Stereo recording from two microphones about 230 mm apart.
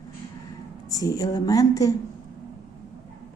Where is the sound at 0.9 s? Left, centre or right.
Centre.